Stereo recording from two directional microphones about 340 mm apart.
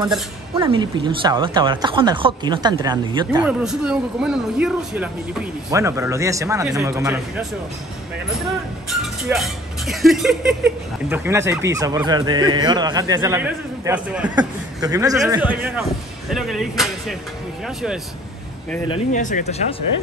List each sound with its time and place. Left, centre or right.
0.6 s speech: centre
3.4 s speech: centre
9.0 s speech: centre
18.9 s speech: left